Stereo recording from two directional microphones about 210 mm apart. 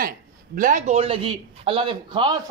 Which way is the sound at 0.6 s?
40° right (ahead or behind).